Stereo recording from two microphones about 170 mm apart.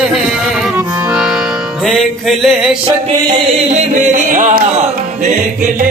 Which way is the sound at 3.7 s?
45° right (ahead or behind).